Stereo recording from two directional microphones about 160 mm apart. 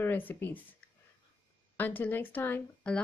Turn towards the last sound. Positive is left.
turn(degrees=10)  # may be behind; listen again after turning